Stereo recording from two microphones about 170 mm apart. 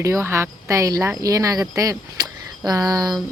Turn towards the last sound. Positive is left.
turn(degrees=-20)  # may be behind; listen again after turning